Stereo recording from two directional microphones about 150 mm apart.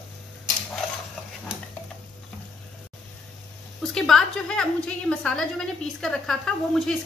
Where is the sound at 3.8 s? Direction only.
Centre (ahead or behind).